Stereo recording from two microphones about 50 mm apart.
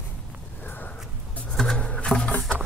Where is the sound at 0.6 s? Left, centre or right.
Left.